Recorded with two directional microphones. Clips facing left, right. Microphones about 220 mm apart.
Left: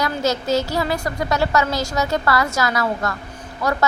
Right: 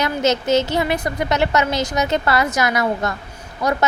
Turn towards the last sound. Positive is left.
turn(degrees=-20)  # may be behind; listen again after turning